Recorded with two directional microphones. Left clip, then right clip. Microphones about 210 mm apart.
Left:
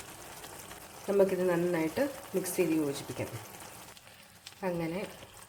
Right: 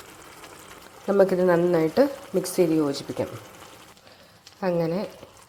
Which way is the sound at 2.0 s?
25° right (ahead or behind).